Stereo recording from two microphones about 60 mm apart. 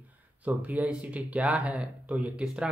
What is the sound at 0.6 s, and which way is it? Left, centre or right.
Speech, right.